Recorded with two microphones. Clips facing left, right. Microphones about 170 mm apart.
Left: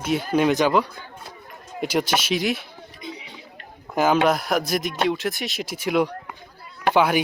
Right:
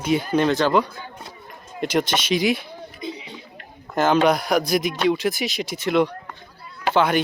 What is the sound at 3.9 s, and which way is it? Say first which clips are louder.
A man's voice: right 1 dB; 5° left (ahead or behind).